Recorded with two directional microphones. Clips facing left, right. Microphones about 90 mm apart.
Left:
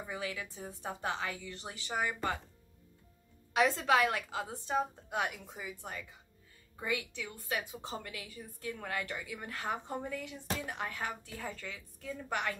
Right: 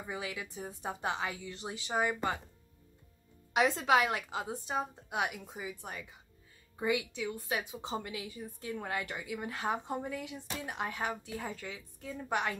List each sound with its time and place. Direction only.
0.1 s a woman's voice: 20° right (ahead or behind)
3.5 s a woman's voice: 15° right (ahead or behind)